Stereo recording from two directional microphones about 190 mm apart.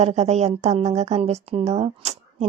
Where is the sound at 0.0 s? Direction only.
35° right (ahead or behind).